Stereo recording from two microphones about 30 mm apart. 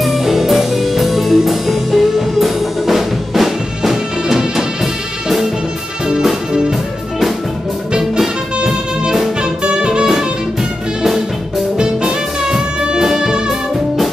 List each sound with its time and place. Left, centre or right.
0.0 s music: centre
8.0 s music: centre
9.4 s music: right
11.7 s music: right